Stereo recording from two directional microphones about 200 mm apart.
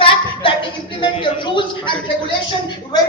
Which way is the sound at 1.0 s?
25° left (ahead or behind).